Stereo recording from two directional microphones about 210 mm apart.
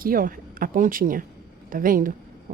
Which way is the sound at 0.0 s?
40° right (ahead or behind).